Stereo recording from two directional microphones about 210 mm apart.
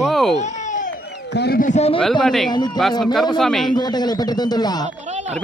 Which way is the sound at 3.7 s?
20° left (ahead or behind).